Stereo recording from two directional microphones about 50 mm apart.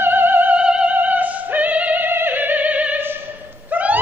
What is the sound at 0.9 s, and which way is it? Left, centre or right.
Music, right.